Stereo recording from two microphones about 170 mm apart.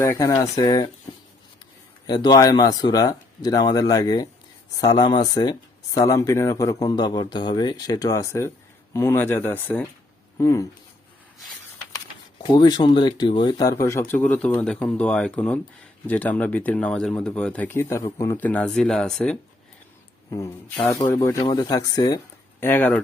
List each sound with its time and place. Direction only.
0.0 s speech: 15° left (ahead or behind)
2.0 s speech: 25° left (ahead or behind)
12.4 s speech: 25° left (ahead or behind); by 19.4 s 5° left (ahead or behind)
20.3 s speech: 15° left (ahead or behind)